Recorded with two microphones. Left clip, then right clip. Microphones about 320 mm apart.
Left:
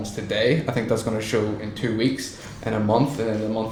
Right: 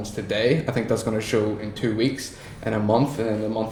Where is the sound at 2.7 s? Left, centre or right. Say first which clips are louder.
Even; centre.